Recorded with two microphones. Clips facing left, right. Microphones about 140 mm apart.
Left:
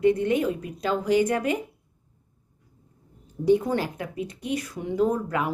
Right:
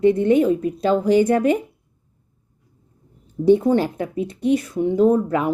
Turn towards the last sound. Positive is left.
turn(degrees=-30)  # may be behind; listen again after turning